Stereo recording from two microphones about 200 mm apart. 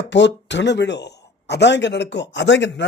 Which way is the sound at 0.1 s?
60° left (ahead or behind).